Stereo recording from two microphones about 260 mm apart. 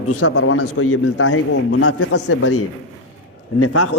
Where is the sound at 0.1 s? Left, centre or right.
Left.